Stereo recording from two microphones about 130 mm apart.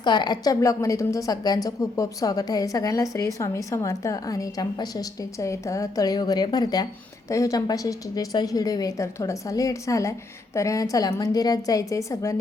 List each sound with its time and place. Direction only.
0.0 s a woman's voice: 35° left (ahead or behind)